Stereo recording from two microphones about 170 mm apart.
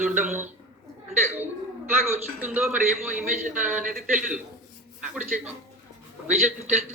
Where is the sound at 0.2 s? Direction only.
10° right (ahead or behind).